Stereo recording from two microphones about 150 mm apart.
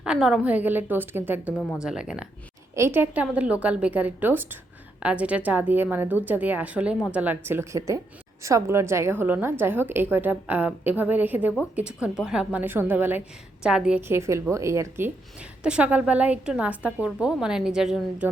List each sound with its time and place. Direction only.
0.0 s a woman's voice: 5° right (ahead or behind)
1.5 s speech: 5° left (ahead or behind)
1.8 s speech: 5° right (ahead or behind)
2.7 s a woman's voice: 15° right (ahead or behind)
14.1 s a woman's voice: 20° right (ahead or behind)